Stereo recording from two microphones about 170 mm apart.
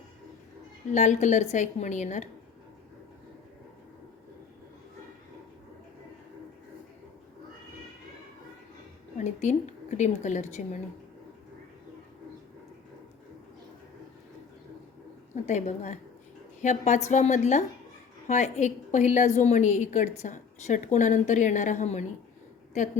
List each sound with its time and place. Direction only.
0.9 s a woman's voice: 45° left (ahead or behind)
9.1 s a woman's voice: 45° left (ahead or behind)
15.4 s a woman's voice: 45° left (ahead or behind)